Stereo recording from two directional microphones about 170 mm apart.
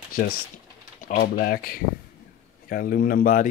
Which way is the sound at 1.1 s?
60° left (ahead or behind).